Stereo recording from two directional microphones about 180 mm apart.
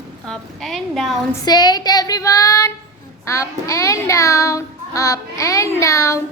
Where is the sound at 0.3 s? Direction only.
Centre (ahead or behind).